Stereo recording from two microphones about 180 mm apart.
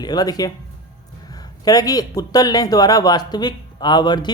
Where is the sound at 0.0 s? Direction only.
20° left (ahead or behind).